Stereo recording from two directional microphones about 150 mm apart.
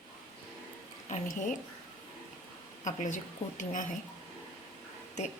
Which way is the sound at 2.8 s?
55° left (ahead or behind).